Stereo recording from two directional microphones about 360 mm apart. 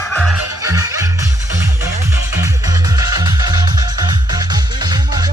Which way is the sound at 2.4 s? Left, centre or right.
Centre.